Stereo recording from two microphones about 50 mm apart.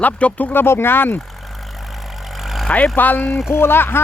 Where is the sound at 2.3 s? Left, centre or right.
Centre.